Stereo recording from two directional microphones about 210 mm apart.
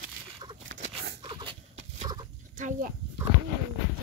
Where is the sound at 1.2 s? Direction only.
20° right (ahead or behind).